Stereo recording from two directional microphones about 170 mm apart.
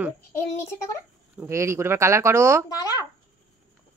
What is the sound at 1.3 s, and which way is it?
Speech, 15° right (ahead or behind).